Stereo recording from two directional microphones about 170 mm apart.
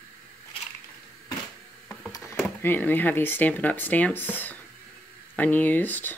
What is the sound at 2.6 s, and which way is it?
Speech, 10° left (ahead or behind).